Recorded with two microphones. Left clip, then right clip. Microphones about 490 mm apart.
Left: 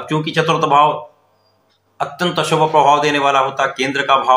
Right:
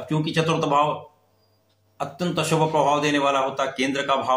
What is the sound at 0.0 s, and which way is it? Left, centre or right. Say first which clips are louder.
Speech: left 7 dB; right.